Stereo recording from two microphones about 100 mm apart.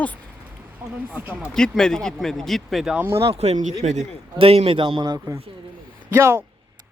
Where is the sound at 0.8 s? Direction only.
20° right (ahead or behind).